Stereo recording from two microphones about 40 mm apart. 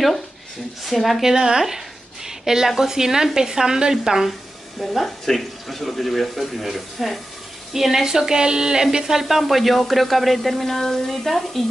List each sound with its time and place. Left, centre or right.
0.8 s speech: centre
1.2 s a woman's voice: centre
4.7 s speech: centre
9.2 s speech: centre